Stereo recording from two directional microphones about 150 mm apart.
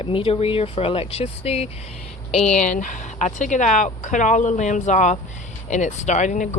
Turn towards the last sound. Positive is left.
turn(degrees=55)  # may be behind; listen again after turning